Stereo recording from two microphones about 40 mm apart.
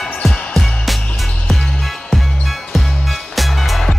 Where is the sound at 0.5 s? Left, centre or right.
Centre.